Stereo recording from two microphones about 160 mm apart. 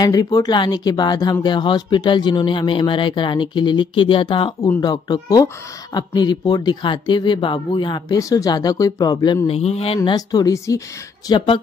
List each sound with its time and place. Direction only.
0.0 s speech: 25° left (ahead or behind)
9.6 s speech: 40° left (ahead or behind)
9.9 s speech: 25° left (ahead or behind)